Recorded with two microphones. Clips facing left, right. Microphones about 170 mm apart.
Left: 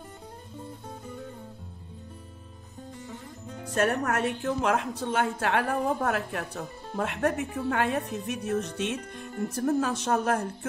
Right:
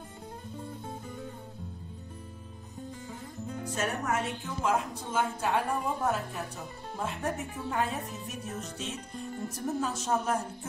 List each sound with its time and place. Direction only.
3.6 s a woman's voice: 60° left (ahead or behind)